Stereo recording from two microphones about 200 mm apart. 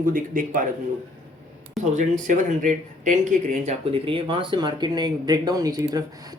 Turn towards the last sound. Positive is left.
turn(degrees=-20)  # may be behind; listen again after turning